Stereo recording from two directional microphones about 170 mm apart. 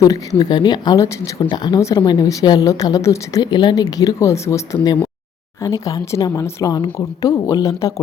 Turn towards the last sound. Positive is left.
turn(degrees=20)  # may be behind; listen again after turning